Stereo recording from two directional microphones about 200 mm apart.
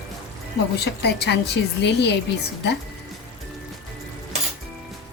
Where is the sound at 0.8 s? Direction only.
55° left (ahead or behind).